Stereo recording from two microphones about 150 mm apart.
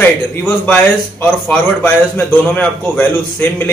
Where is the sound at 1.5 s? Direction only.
10° left (ahead or behind).